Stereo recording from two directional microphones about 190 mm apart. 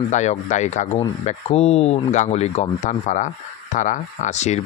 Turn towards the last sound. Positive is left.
turn(degrees=35)  # may be behind; listen again after turning